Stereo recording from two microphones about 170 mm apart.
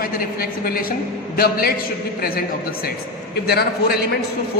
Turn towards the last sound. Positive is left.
turn(degrees=70)  # may be behind; listen again after turning